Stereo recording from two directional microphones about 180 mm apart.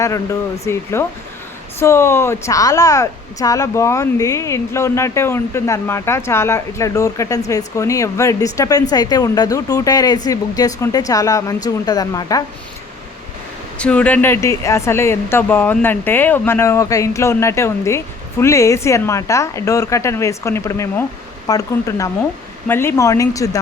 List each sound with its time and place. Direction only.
0.0 s speech: 15° left (ahead or behind)
13.7 s speech: 5° left (ahead or behind)